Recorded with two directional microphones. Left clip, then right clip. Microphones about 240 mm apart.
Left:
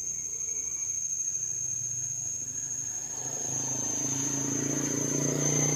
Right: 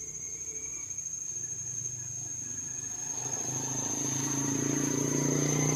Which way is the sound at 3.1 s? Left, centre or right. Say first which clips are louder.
Right 1 dB; right.